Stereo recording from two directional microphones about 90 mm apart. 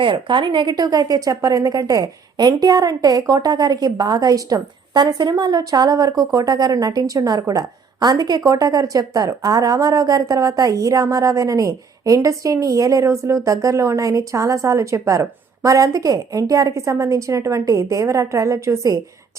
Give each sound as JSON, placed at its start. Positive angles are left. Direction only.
{"t": 0.0, "sound": "a woman's voice", "side_deg": -65}